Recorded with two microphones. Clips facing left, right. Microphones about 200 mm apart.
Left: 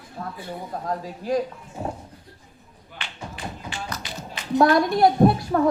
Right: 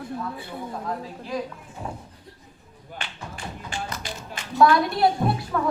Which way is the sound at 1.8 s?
35° left (ahead or behind).